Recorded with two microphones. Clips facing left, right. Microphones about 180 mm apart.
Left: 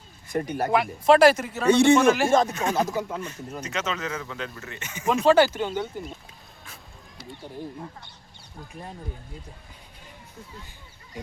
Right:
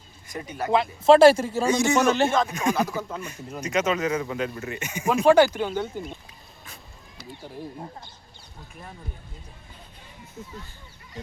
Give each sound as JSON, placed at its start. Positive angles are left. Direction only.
{"t": 0.3, "sound": "speech", "side_deg": 55}
{"t": 0.7, "sound": "speech", "side_deg": -25}
{"t": 1.7, "sound": "speech", "side_deg": 30}
{"t": 2.5, "sound": "speech", "side_deg": -10}
{"t": 2.7, "sound": "speech", "side_deg": 20}
{"t": 3.2, "sound": "speech", "side_deg": -10}
{"t": 5.7, "sound": "speech", "side_deg": 5}